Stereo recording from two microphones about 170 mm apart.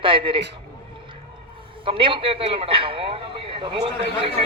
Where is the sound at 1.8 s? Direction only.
30° right (ahead or behind).